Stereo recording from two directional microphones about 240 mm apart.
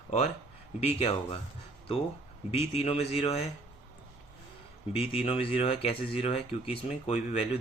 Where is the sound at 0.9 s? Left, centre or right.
Left.